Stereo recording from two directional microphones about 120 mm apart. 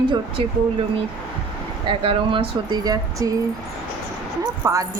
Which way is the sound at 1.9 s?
45° right (ahead or behind).